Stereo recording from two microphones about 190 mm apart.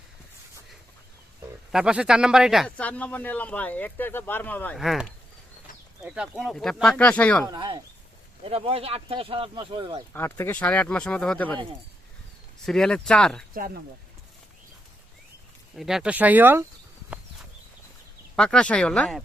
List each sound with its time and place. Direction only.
1.7 s speech: 5° right (ahead or behind)
7.4 s speech: 20° right (ahead or behind)
10.1 s speech: 10° left (ahead or behind)
12.6 s speech: 5° left (ahead or behind)
13.5 s speech: 50° right (ahead or behind)
15.7 s speech: centre (ahead or behind)
18.3 s speech: 5° left (ahead or behind)